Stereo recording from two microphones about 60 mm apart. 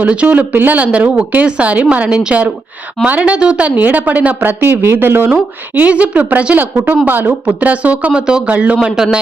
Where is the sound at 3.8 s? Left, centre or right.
Right.